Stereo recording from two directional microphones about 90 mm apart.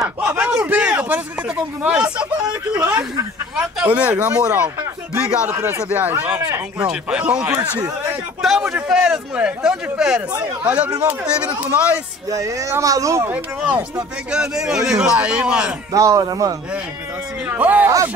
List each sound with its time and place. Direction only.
0.4 s a sound: 5° right (ahead or behind)
0.7 s speech: 15° right (ahead or behind)
2.8 s speech: 45° right (ahead or behind)
3.5 s speech: 15° right (ahead or behind)
5.5 s a man's voice: 25° right (ahead or behind)
12.3 s speech: 40° right (ahead or behind)
13.3 s speech: 15° right (ahead or behind)
15.9 s speech: 40° right (ahead or behind)
17.5 s speech: 20° right (ahead or behind)